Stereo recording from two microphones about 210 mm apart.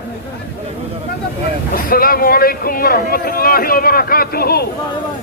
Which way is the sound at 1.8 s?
45° left (ahead or behind).